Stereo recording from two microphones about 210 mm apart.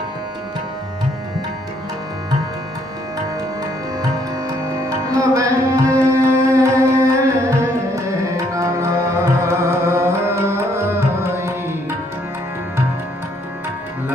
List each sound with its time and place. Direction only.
5.3 s music: 15° right (ahead or behind)